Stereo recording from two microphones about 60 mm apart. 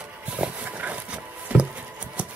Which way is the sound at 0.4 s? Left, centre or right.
Right.